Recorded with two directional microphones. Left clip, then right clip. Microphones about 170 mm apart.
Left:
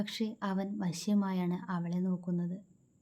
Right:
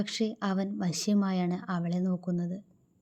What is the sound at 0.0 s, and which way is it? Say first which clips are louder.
Speech: right 5 dB; 20° right (ahead or behind).